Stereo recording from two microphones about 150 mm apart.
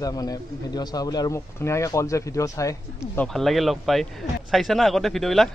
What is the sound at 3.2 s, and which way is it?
A man's voice, centre (ahead or behind).